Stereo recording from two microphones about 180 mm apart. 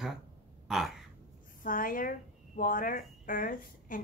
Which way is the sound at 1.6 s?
50° left (ahead or behind).